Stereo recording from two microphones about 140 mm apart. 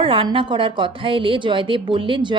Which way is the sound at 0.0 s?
40° right (ahead or behind).